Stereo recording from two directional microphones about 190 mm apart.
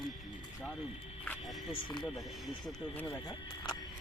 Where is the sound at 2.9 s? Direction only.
20° left (ahead or behind).